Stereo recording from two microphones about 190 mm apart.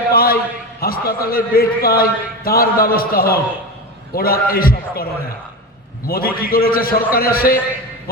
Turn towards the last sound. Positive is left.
turn(degrees=50)  # may be behind; listen again after turning